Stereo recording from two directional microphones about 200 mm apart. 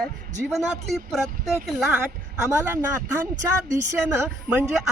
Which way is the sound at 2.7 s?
10° right (ahead or behind).